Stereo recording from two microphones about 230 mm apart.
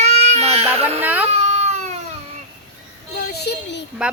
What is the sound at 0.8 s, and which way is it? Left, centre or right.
Speech, right.